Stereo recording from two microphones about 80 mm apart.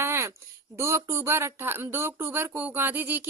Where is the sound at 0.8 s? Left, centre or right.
Right.